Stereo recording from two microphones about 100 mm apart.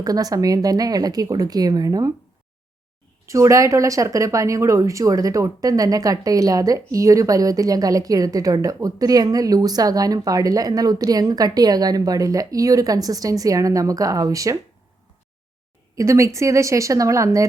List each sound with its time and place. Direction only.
0.0 s speech: 40° right (ahead or behind)
3.2 s speech: 30° right (ahead or behind)
16.0 s speech: 30° right (ahead or behind)